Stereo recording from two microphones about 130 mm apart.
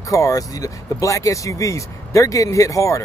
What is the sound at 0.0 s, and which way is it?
Speech, 25° left (ahead or behind).